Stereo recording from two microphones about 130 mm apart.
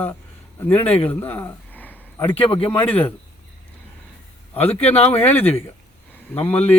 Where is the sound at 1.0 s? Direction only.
15° left (ahead or behind).